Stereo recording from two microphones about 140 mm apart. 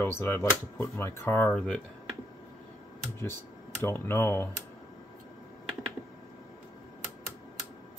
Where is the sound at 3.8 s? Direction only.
15° left (ahead or behind).